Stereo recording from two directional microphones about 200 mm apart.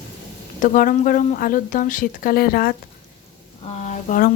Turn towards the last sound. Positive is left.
turn(degrees=40)  # may be behind; listen again after turning